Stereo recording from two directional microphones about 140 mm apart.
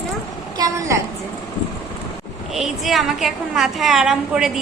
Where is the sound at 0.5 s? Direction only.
25° right (ahead or behind).